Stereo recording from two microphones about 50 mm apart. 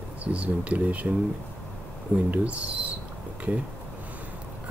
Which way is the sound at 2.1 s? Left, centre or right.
Right.